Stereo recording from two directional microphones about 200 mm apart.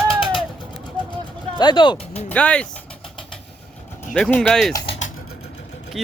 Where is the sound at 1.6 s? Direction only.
20° left (ahead or behind).